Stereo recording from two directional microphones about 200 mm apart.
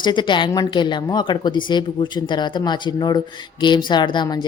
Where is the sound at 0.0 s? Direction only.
25° left (ahead or behind).